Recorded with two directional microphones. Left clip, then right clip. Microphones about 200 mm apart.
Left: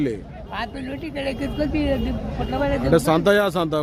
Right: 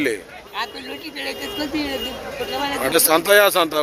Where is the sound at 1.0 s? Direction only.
45° left (ahead or behind).